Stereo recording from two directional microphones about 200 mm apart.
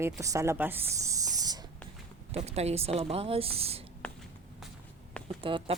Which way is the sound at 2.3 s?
30° right (ahead or behind).